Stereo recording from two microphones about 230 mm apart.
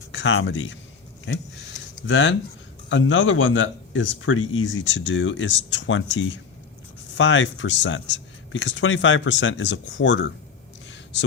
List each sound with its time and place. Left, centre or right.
0.1 s speech: left
1.2 s a sound: left
2.9 s speech: left